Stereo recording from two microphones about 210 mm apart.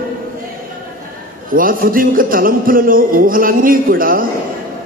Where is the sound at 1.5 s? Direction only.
40° right (ahead or behind).